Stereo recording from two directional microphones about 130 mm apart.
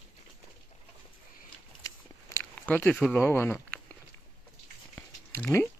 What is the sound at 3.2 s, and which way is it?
Speech, 15° left (ahead or behind).